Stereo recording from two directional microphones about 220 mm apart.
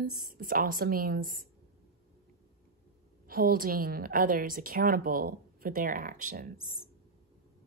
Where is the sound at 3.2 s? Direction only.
40° right (ahead or behind).